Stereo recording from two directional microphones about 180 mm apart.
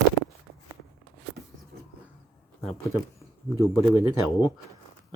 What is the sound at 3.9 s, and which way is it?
Speech, 25° left (ahead or behind).